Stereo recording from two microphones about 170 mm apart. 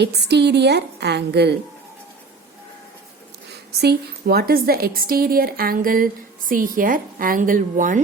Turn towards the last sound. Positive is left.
turn(degrees=-50)  # may be behind; listen again after turning